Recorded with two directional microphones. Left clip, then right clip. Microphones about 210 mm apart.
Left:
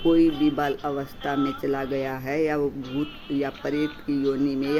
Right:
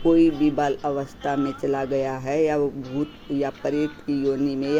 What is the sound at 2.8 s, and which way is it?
Speech, 20° left (ahead or behind).